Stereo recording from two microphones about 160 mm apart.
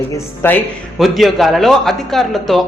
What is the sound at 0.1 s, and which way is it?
Speech, 10° left (ahead or behind).